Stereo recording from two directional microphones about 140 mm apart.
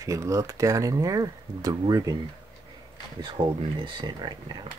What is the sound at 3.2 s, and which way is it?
Speech, 35° right (ahead or behind).